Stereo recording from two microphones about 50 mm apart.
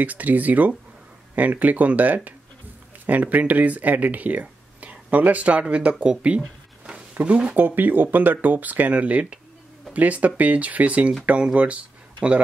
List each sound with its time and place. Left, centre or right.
0.0 s speech: right